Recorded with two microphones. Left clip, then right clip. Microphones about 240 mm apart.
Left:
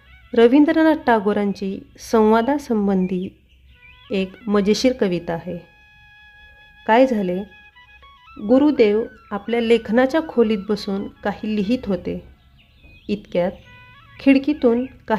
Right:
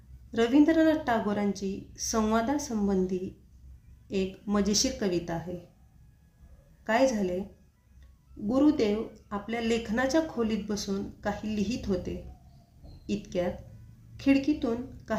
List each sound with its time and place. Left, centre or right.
0.3 s speech: left
6.8 s speech: left
8.4 s speech: left